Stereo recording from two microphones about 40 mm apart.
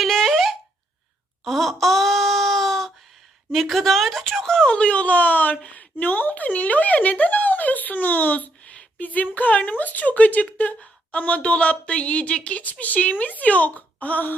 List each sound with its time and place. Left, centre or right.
0.0 s a sound: centre
3.5 s a woman's voice: centre
4.7 s a woman's voice: left
8.6 s a woman's voice: left